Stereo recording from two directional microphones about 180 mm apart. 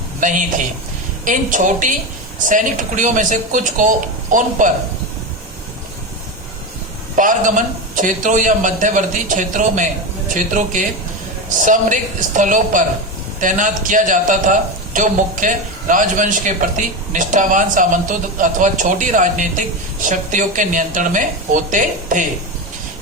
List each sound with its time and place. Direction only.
0.2 s speech: 45° right (ahead or behind)
7.2 s speech: 45° right (ahead or behind)